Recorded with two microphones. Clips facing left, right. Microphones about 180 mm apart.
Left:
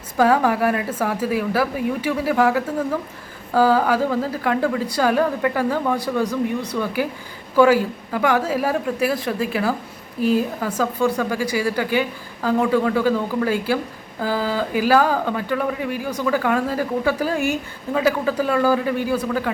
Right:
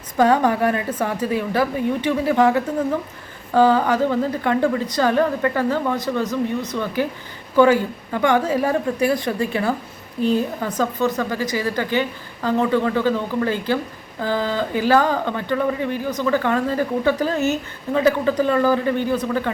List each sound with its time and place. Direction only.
0.2 s a woman's voice: 5° left (ahead or behind)